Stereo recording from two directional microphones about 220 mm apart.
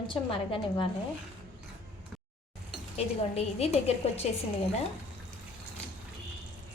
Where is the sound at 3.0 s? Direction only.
30° left (ahead or behind).